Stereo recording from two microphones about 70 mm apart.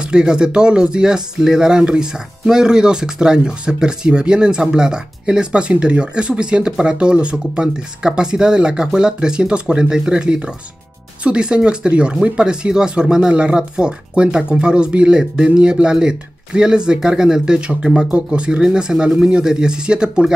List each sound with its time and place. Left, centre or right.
0.0 s speech: centre